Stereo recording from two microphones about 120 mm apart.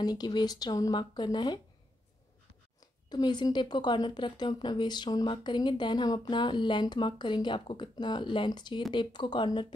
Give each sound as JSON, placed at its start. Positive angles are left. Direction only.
{"t": 0.0, "sound": "a woman's voice", "side_deg": 35}
{"t": 3.1, "sound": "a woman's voice", "side_deg": 35}